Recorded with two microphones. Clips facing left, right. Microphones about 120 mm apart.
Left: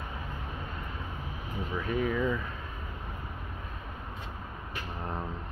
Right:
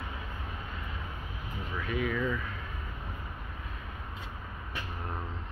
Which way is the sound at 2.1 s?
15° left (ahead or behind).